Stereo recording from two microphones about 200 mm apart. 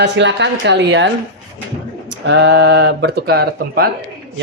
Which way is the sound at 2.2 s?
65° right (ahead or behind).